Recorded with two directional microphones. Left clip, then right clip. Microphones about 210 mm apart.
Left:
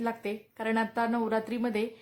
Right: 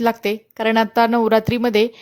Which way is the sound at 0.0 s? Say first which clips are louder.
Right 14 dB; 40° right (ahead or behind).